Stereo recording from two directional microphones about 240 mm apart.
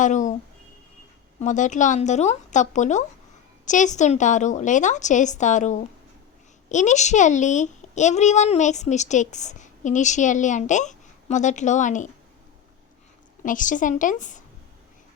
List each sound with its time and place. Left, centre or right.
0.0 s a child's voice: left
1.4 s a child's voice: left
13.4 s a child's voice: left